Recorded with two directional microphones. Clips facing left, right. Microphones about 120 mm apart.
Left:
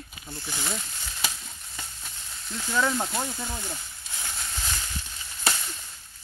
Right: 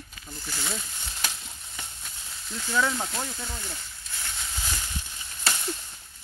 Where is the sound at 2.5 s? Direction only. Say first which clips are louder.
Left 1 dB; 10° left (ahead or behind).